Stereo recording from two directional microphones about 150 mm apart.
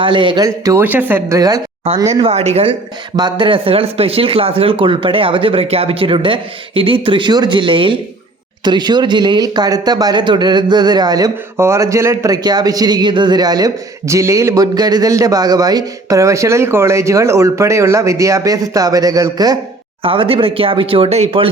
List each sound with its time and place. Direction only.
0.0 s speech: 35° right (ahead or behind)
2.1 s speech: 40° right (ahead or behind)
3.2 s speech: 30° right (ahead or behind)
20.0 s speech: 35° right (ahead or behind)